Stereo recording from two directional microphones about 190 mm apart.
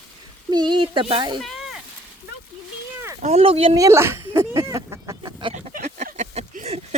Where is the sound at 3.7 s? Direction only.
15° right (ahead or behind).